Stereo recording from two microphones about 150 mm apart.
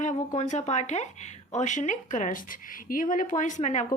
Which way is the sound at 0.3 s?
50° left (ahead or behind).